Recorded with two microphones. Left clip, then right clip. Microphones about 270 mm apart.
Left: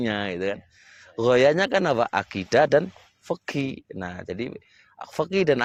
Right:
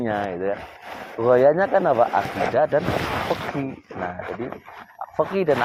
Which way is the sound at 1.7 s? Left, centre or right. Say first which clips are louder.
Right 4 dB; left.